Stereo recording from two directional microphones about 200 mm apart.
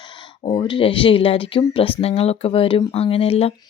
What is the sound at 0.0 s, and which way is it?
Speech, 25° left (ahead or behind).